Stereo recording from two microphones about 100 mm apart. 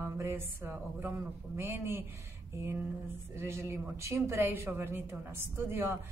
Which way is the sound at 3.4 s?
25° right (ahead or behind).